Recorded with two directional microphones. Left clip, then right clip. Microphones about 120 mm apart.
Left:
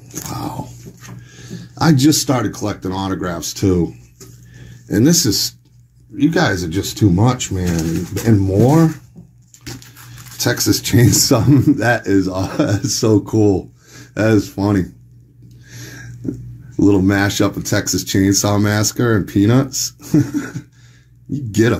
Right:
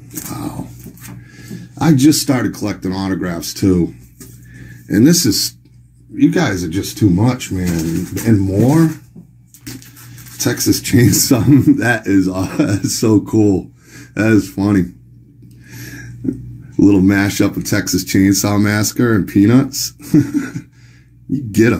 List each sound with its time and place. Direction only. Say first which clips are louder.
0.3 s a sound: left 1 dB; 25° left (ahead or behind)
2.0 s speech: right 2 dB; 5° left (ahead or behind)
6.1 s speech: right 1 dB; 15° left (ahead or behind); by 8.8 s 35° left (ahead or behind)
10.3 s speech: even; 25° left (ahead or behind); by 14.9 s 5° left (ahead or behind)
16.8 s speech: right 2 dB; 10° left (ahead or behind)